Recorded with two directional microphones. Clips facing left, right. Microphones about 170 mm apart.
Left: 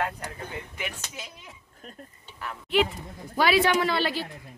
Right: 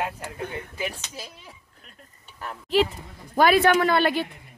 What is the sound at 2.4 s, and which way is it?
Speech, 35° right (ahead or behind).